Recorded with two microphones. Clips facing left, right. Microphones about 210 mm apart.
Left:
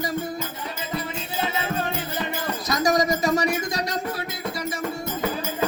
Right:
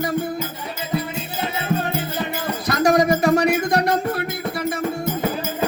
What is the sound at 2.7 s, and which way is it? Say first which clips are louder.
Music: right 5 dB; 60° right (ahead or behind).